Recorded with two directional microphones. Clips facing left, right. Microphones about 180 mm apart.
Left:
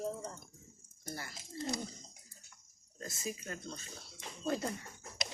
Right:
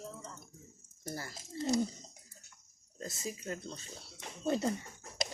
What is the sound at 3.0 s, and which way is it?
Speech, 30° right (ahead or behind).